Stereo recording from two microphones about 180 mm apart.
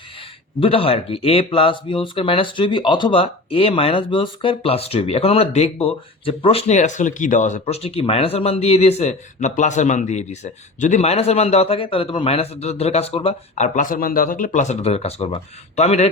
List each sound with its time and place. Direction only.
0.6 s speech: 30° left (ahead or behind)